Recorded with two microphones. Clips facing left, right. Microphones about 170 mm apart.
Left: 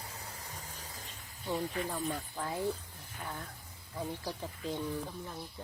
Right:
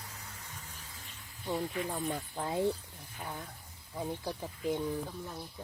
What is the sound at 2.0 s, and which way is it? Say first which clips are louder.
Speech: right 1 dB; 20° right (ahead or behind).